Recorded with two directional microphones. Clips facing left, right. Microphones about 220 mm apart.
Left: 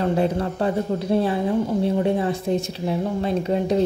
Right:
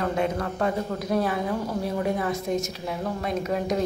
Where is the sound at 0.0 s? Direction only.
30° left (ahead or behind).